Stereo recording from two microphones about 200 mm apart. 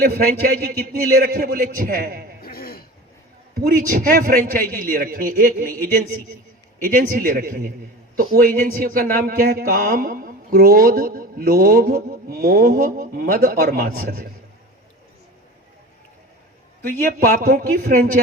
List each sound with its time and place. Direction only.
0.0 s a man's voice: 50° right (ahead or behind)
2.4 s a sound: 50° left (ahead or behind)
3.6 s a man's voice: 45° right (ahead or behind)
17.2 s a man's voice: 45° right (ahead or behind)